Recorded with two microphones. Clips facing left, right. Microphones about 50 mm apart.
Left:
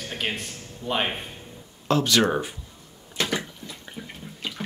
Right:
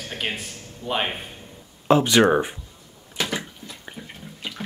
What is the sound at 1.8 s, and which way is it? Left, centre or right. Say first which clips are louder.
Speech: right 5 dB; right.